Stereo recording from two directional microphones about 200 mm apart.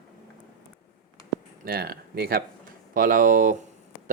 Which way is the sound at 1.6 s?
50° right (ahead or behind).